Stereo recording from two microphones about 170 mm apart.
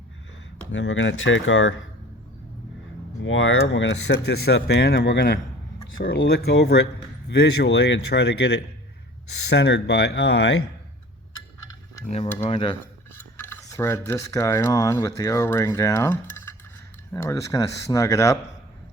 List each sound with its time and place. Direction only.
0.7 s speech: 90° left
3.3 s speech: 90° left; by 6.7 s 70° left (ahead or behind)
7.3 s speech: 85° left
12.0 s speech: 40° left (ahead or behind)
13.1 s a sound: 10° left (ahead or behind)
17.2 s speech: 15° left (ahead or behind)